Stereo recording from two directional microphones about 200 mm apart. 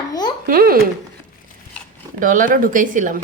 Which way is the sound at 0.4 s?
45° right (ahead or behind).